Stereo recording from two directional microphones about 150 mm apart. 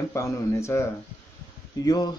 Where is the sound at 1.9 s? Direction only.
25° left (ahead or behind).